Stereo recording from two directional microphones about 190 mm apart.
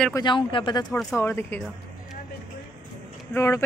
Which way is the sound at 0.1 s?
25° left (ahead or behind).